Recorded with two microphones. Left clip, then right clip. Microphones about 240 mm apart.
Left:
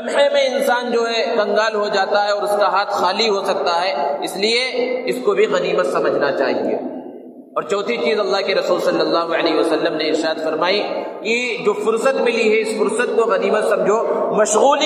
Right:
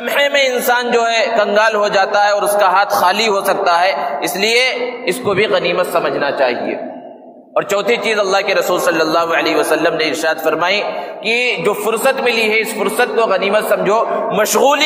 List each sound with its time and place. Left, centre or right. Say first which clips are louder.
0.1 s a man's voice: right 2 dB; right
7.5 s a man's voice: right 5 dB; right